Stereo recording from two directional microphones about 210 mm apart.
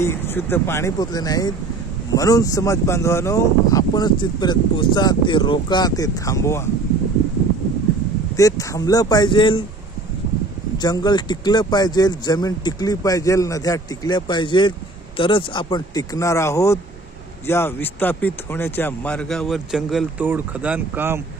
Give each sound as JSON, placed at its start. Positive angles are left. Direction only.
{"t": 0.0, "sound": "speech", "side_deg": 10}
{"t": 8.4, "sound": "speech", "side_deg": 15}
{"t": 10.8, "sound": "speech", "side_deg": 20}